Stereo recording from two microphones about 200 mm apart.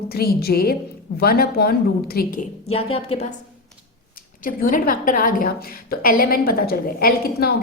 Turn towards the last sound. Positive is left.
turn(degrees=50)  # may be behind; listen again after turning